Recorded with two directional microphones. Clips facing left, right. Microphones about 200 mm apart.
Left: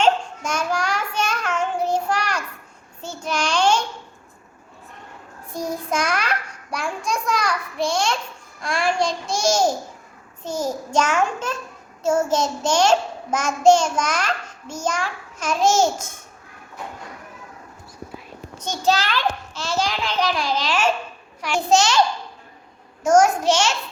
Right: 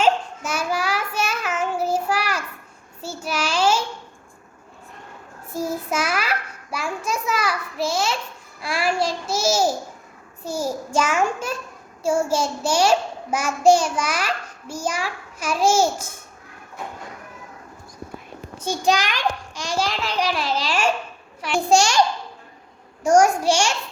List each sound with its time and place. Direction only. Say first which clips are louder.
0.0 s child singing: left 1 dB; 5° right (ahead or behind)
5.5 s child singing: even; 5° right (ahead or behind)
8.6 s babbling: left 1 dB; 5° right (ahead or behind)
10.4 s a sound: even; 10° right (ahead or behind)
12.0 s child singing: left 1 dB; 10° right (ahead or behind)
18.6 s a sound: even; 10° right (ahead or behind)
19.9 s a child's voice: left 1 dB; 5° right (ahead or behind)
23.0 s a child's voice: even; 10° right (ahead or behind)